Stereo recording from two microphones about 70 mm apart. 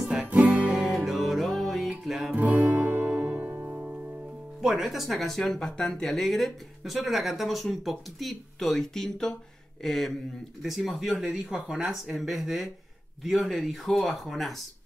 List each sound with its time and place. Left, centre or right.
0.0 s music: centre
2.3 s music: right
4.6 s speech: centre